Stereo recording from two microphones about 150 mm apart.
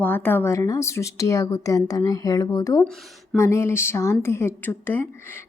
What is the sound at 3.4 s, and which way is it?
A woman's voice, 20° left (ahead or behind).